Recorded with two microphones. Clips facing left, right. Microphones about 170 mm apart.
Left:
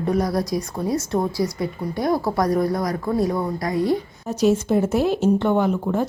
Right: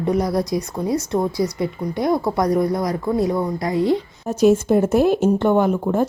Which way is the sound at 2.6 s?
20° right (ahead or behind).